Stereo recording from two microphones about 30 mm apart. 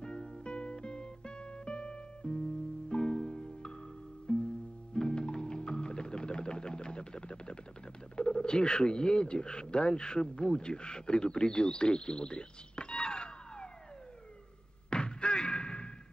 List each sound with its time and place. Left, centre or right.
0.0 s music: left
4.3 s music: left
4.9 s music: left
8.2 s telephone: left
8.5 s speech: left
14.9 s a sound: left